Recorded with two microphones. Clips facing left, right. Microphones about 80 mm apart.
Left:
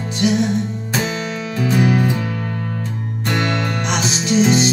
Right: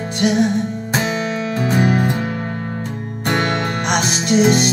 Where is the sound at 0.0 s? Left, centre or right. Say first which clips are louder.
Right 1 dB; right.